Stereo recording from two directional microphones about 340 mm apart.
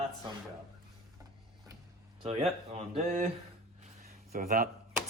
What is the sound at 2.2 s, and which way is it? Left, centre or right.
Speech, centre.